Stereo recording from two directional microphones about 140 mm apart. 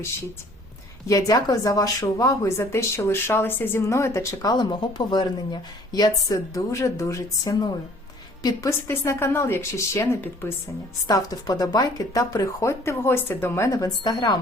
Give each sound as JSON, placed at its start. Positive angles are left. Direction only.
{"t": 1.0, "sound": "a woman's voice", "side_deg": 25}
{"t": 4.5, "sound": "a woman's voice", "side_deg": 35}
{"t": 8.9, "sound": "a woman's voice", "side_deg": 20}